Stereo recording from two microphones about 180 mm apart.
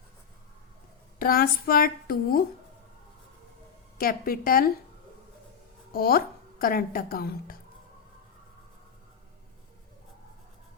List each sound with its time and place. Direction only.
1.2 s a woman's voice: 55° left (ahead or behind)
3.9 s a woman's voice: 55° left (ahead or behind)
5.9 s a woman's voice: 55° left (ahead or behind)